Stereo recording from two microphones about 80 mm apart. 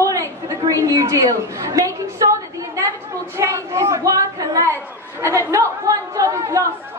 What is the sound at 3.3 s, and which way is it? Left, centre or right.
A woman's voice, right.